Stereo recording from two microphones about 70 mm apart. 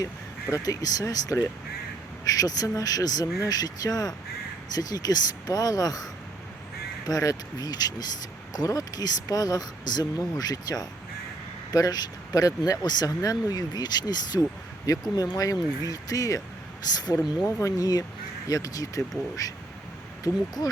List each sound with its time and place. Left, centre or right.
0.6 s speech: left
2.4 s speech: left
15.1 s speech: left
16.8 s speech: left
17.4 s speech: left
20.2 s speech: left